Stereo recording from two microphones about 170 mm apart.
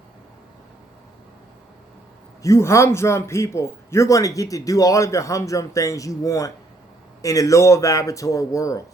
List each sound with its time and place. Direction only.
2.4 s a man's voice: 15° left (ahead or behind)